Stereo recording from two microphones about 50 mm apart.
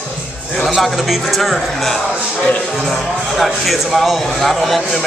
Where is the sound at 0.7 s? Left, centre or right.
Centre.